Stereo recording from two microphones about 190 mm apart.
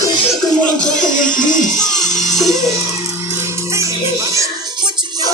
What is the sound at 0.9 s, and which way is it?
Music, 45° left (ahead or behind).